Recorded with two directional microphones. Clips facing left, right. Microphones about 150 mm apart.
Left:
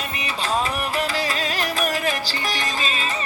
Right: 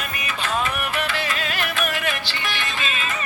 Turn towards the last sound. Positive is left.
turn(degrees=35)  # may be behind; listen again after turning